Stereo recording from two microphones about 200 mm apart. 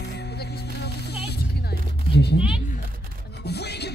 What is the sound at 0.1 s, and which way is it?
Music, 55° left (ahead or behind).